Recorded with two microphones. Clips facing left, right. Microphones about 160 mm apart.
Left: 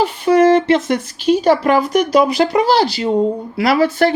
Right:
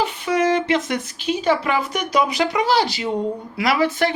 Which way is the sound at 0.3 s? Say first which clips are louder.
Left 8 dB; 35° left (ahead or behind).